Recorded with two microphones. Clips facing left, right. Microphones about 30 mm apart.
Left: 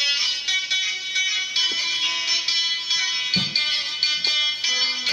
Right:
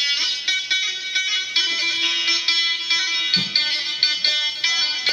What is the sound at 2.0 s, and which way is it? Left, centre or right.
Music, right.